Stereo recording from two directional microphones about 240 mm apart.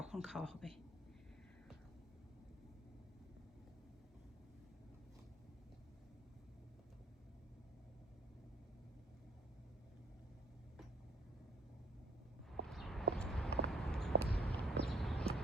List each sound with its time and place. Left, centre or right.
0.0 s speech: centre
12.6 s horse: centre
13.1 s walk: centre
14.3 s walk: left
14.5 s horse: centre